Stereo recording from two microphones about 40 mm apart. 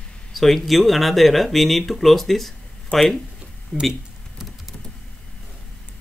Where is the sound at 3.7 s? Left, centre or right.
Centre.